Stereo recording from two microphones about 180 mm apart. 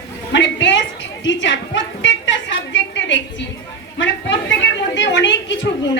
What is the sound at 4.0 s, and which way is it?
A woman's voice, 90° left.